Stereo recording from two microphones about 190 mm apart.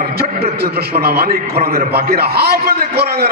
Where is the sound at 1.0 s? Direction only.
55° right (ahead or behind).